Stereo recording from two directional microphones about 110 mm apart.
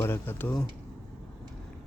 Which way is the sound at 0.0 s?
20° left (ahead or behind).